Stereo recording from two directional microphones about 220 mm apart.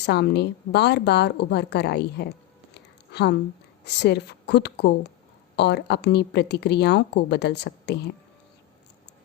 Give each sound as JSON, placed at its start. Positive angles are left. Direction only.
{"t": 0.0, "sound": "a woman's voice", "side_deg": 50}